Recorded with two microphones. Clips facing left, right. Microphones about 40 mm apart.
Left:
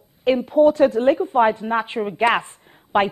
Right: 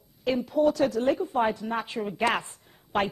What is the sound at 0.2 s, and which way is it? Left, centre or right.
A woman's voice, left.